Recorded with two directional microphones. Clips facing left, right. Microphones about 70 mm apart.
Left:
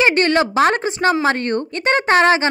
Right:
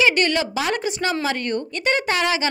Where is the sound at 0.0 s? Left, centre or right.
Left.